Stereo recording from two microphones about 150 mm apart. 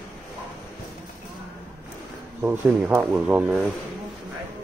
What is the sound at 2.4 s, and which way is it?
Speech, 10° right (ahead or behind).